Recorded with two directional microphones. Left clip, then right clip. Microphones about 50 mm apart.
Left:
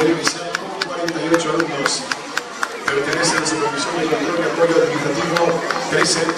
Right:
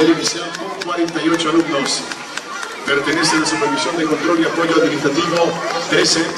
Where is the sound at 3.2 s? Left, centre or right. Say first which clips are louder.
Right 2 dB; centre.